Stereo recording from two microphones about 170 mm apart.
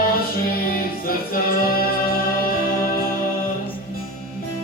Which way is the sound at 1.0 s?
60° left (ahead or behind).